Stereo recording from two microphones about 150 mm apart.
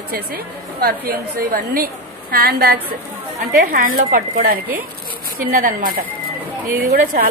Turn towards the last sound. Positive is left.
turn(degrees=-70)  # may be behind; listen again after turning